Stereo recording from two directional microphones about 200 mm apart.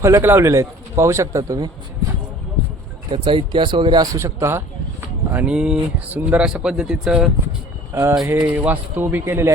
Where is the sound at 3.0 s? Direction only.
25° right (ahead or behind).